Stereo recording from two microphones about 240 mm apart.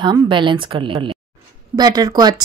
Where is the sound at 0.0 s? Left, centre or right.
Centre.